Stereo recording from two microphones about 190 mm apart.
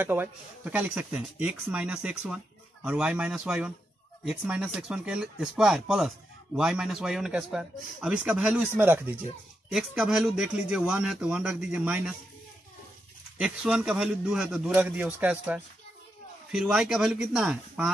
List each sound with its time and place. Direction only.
0.0 s speech: 10° right (ahead or behind)
13.4 s speech: 5° right (ahead or behind)